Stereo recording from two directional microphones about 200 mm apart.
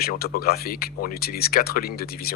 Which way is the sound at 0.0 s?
50° left (ahead or behind).